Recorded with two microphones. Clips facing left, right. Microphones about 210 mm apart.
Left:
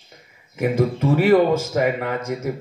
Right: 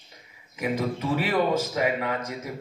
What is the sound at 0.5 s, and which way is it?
Speech, 50° left (ahead or behind).